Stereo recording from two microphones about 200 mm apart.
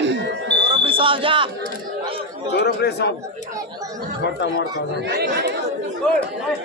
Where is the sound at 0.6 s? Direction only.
25° right (ahead or behind).